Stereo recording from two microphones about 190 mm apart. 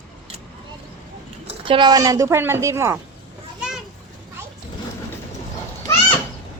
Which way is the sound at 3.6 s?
5° right (ahead or behind).